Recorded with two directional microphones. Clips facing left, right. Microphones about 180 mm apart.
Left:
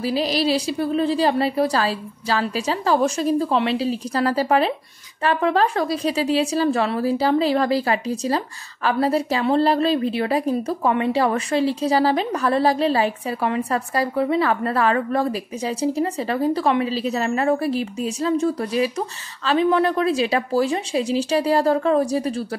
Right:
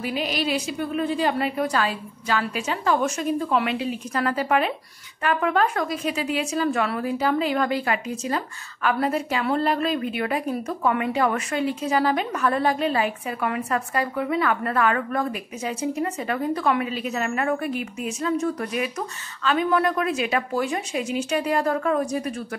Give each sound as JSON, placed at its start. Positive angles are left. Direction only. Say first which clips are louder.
{"t": 0.0, "sound": "a woman's voice", "louder": "left 5 dB", "side_deg": 35}